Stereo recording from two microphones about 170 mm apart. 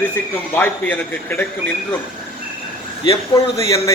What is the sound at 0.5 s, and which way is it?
Speech, 10° left (ahead or behind).